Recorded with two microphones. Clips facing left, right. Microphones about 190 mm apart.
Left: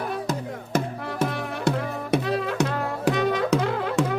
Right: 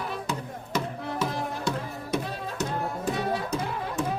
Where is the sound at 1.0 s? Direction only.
70° left (ahead or behind).